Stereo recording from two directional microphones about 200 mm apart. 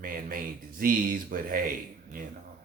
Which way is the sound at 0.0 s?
45° right (ahead or behind).